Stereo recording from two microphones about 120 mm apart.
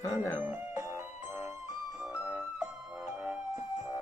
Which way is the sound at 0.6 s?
25° right (ahead or behind).